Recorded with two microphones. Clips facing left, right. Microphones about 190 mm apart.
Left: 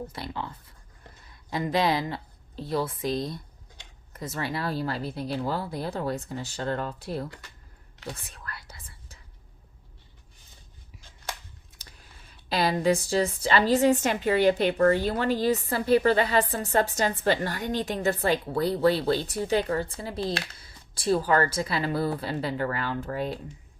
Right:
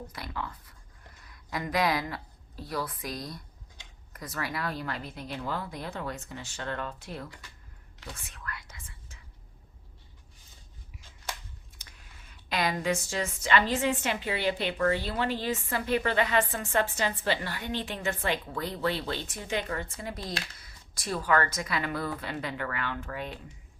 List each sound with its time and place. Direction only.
0.1 s a woman's voice: 30° left (ahead or behind)
8.3 s whispering: 35° left (ahead or behind)
11.8 s typing: 35° left (ahead or behind)
12.5 s a woman's voice: 35° left (ahead or behind)